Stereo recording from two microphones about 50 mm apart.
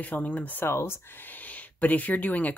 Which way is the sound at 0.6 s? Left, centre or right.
Left.